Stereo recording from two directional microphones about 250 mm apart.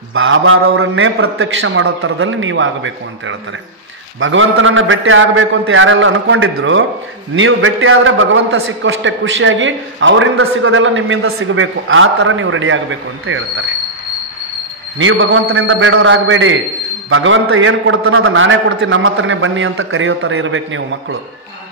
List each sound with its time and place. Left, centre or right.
0.1 s a man's voice: right
15.0 s a man's voice: right